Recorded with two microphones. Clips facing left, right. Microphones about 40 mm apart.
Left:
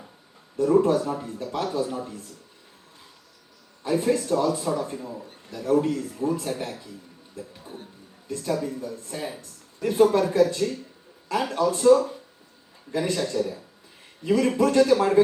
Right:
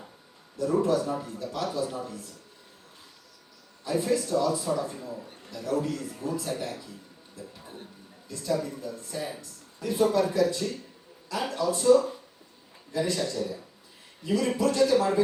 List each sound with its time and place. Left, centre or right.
0.5 s speech: left
3.8 s speech: left
7.3 s a sound: left
8.3 s a woman's voice: left